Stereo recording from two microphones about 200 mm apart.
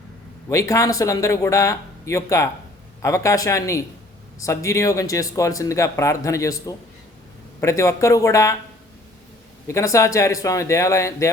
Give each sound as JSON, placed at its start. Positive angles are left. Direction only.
{"t": 0.4, "sound": "speech", "side_deg": 15}
{"t": 9.6, "sound": "speech", "side_deg": 15}